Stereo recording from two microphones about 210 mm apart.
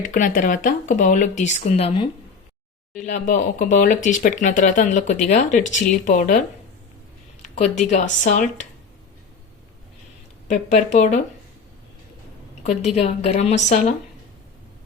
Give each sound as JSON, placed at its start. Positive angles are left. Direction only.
{"t": 0.0, "sound": "speech", "side_deg": 40}
{"t": 7.4, "sound": "speech", "side_deg": 35}
{"t": 10.5, "sound": "speech", "side_deg": 35}
{"t": 12.6, "sound": "speech", "side_deg": 30}